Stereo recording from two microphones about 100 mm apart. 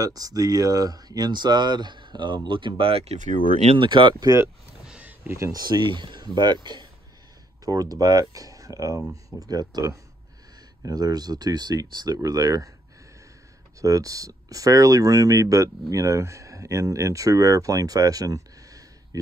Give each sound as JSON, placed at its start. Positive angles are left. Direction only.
{"t": 0.0, "sound": "speech", "side_deg": -40}
{"t": 3.6, "sound": "speech", "side_deg": -55}
{"t": 4.8, "sound": "a sound", "side_deg": -15}
{"t": 5.4, "sound": "speech", "side_deg": -40}
{"t": 13.7, "sound": "speech", "side_deg": -35}